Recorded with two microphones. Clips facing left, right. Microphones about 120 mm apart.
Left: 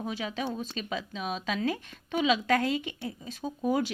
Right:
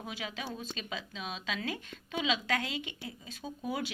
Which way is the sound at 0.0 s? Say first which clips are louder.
Left 7 dB; 40° left (ahead or behind).